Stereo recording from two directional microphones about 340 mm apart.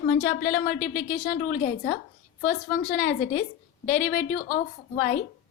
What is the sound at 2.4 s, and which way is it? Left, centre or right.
A woman's voice, left.